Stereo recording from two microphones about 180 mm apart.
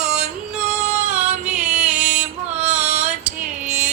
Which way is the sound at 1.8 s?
40° right (ahead or behind).